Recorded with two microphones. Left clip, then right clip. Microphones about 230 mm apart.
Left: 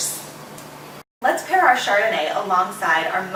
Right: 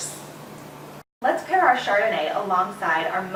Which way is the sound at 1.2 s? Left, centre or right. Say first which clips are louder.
Left 3 dB; centre.